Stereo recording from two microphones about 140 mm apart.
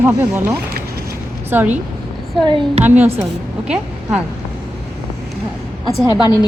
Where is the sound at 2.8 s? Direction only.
10° right (ahead or behind).